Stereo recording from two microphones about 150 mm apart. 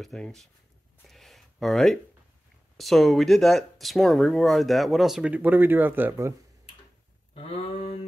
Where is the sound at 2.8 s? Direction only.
Centre (ahead or behind); by 6.3 s 15° right (ahead or behind).